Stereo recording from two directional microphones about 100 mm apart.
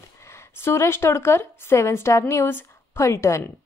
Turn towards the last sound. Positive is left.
turn(degrees=30)  # may be behind; listen again after turning